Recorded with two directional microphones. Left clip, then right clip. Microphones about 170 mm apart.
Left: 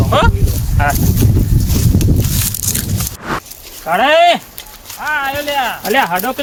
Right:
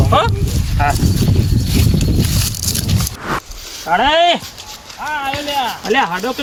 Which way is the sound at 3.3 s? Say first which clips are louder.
Even; centre (ahead or behind).